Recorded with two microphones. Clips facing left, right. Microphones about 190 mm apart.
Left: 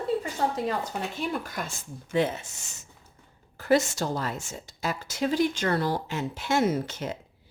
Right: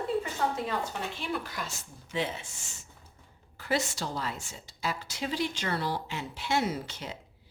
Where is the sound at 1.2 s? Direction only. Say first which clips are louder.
Left 4 dB; 45° left (ahead or behind).